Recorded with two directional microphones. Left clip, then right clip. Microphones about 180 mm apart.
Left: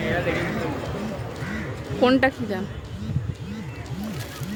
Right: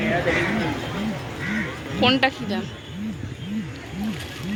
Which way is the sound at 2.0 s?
45° left (ahead or behind).